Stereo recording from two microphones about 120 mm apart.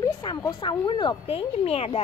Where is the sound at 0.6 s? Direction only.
40° left (ahead or behind).